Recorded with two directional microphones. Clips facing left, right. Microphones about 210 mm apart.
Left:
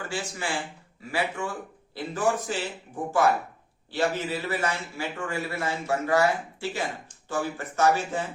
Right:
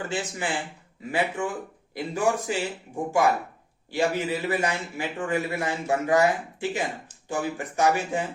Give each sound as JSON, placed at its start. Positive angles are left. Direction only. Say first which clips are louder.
{"t": 0.1, "sound": "a man's voice", "louder": "even", "side_deg": -20}